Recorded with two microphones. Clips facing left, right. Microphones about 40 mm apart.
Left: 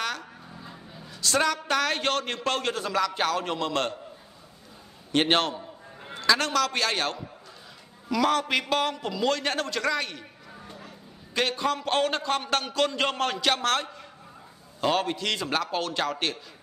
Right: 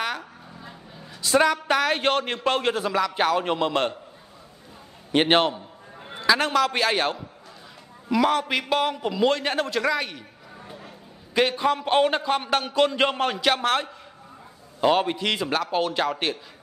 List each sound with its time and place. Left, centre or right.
0.0 s a woman's voice: centre
5.1 s a man's voice: centre
9.4 s a man's voice: centre